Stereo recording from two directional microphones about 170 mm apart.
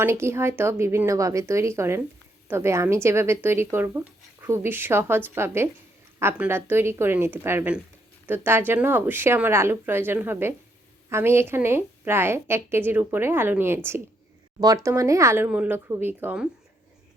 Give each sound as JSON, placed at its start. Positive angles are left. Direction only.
{"t": 0.0, "sound": "speech", "side_deg": -15}